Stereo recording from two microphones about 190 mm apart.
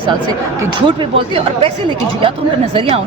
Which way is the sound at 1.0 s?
30° right (ahead or behind).